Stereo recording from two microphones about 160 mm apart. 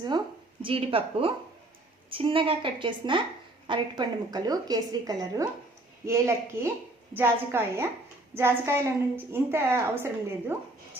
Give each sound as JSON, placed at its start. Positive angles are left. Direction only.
{"t": 0.6, "sound": "a woman's voice", "side_deg": -35}